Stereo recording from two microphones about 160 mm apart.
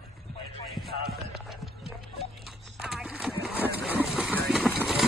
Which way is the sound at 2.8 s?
5° right (ahead or behind).